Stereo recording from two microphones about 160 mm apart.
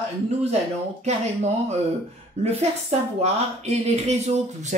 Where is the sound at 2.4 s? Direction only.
40° right (ahead or behind).